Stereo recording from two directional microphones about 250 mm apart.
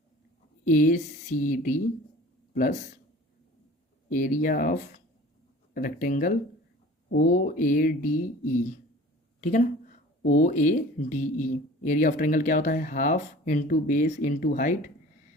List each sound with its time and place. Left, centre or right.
0.6 s speech: left
4.1 s speech: left